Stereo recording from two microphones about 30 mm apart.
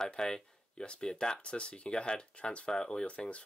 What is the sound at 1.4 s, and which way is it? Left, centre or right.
Speech, left.